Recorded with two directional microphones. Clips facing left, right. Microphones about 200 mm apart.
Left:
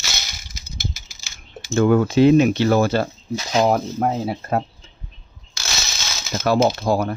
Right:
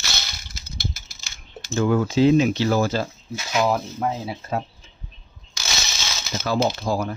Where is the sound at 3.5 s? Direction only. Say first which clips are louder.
Left 4 dB; 40° left (ahead or behind).